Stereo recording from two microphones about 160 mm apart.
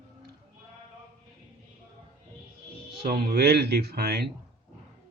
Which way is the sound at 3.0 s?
65° right (ahead or behind).